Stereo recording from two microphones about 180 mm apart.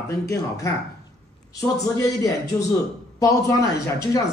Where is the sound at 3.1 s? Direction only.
15° left (ahead or behind).